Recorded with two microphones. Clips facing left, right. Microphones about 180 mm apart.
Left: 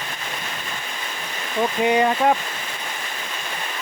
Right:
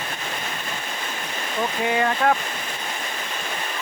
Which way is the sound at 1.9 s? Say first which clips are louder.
Left 2 dB; 20° left (ahead or behind).